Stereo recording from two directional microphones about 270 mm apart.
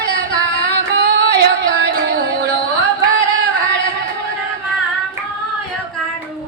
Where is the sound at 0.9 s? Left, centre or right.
Right.